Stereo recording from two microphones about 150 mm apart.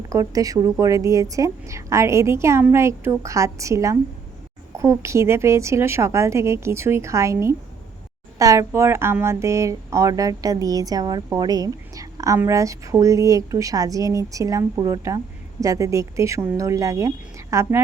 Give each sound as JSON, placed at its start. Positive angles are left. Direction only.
{"t": 0.1, "sound": "speech", "side_deg": -25}